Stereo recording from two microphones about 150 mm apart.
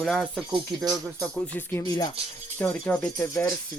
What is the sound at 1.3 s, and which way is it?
Speech, 15° left (ahead or behind).